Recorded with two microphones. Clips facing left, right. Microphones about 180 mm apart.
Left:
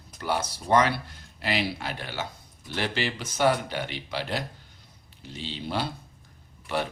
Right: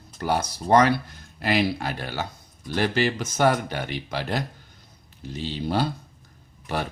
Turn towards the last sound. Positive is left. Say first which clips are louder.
# right 1 dB
turn(degrees=-45)  # may be behind; listen again after turning